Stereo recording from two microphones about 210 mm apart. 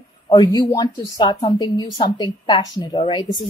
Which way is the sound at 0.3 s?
20° left (ahead or behind).